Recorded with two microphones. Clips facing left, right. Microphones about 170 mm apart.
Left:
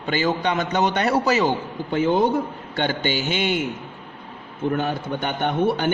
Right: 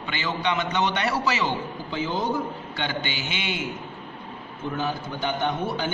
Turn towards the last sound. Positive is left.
turn(degrees=60)  # may be behind; listen again after turning